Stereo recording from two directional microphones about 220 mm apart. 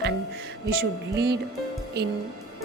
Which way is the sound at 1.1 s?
50° right (ahead or behind).